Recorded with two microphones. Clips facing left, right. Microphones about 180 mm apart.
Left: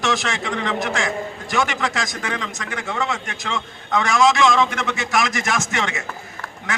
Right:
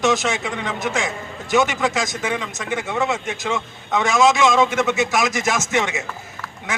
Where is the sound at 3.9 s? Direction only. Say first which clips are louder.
Right 1 dB; 20° right (ahead or behind).